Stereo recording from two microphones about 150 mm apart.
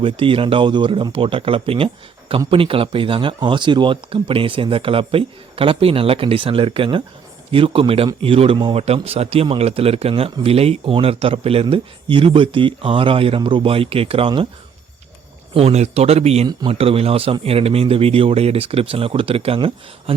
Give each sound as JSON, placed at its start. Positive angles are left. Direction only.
{"t": 0.0, "sound": "speech", "side_deg": -35}
{"t": 15.5, "sound": "speech", "side_deg": -45}
{"t": 16.5, "sound": "speech", "side_deg": -30}
{"t": 16.7, "sound": "speech", "side_deg": -40}